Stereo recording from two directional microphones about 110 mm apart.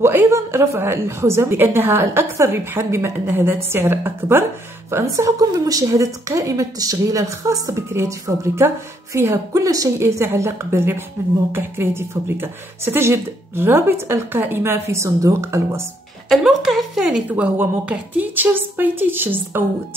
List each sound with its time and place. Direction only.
0.0 s a woman's voice: 20° right (ahead or behind)
16.3 s a woman's voice: centre (ahead or behind); by 19.7 s 20° right (ahead or behind)